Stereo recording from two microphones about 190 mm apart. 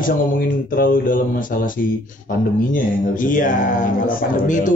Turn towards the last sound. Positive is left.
turn(degrees=45)  # may be behind; listen again after turning